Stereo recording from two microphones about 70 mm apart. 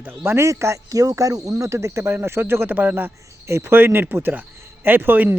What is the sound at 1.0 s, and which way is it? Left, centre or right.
Speech, right.